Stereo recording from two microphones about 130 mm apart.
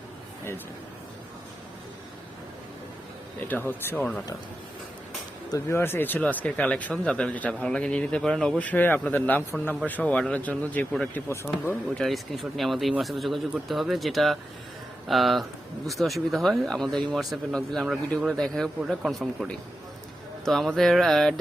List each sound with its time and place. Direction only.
3.5 s speech: 15° left (ahead or behind)
5.5 s speech: 20° left (ahead or behind); by 11.2 s 5° left (ahead or behind)
11.3 s speech: 15° left (ahead or behind)
11.9 s speech: centre (ahead or behind)